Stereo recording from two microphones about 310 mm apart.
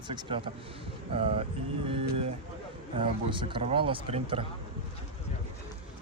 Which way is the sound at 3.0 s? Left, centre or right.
Centre.